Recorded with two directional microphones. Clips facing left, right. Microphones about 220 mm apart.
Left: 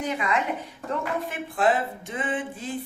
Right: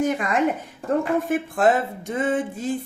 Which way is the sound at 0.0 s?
45° right (ahead or behind).